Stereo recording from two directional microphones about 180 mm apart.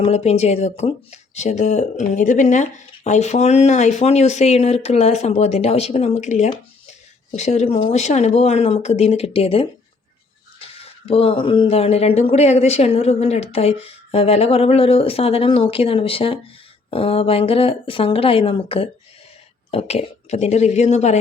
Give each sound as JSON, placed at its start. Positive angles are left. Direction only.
{"t": 0.0, "sound": "speech", "side_deg": 35}